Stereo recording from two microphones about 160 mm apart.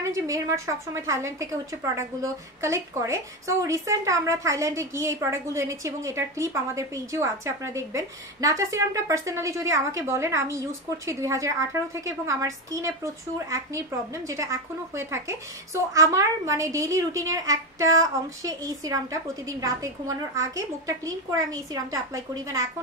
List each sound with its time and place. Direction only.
0.0 s a woman's voice: 20° right (ahead or behind)